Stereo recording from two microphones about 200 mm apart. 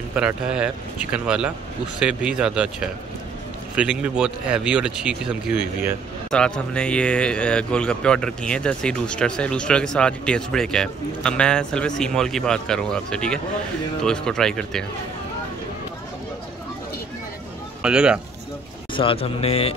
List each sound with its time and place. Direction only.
0.1 s a man's voice: 5° right (ahead or behind)
6.3 s a man's voice: 5° left (ahead or behind)
17.8 s a man's voice: 5° right (ahead or behind)
18.9 s a man's voice: 25° left (ahead or behind)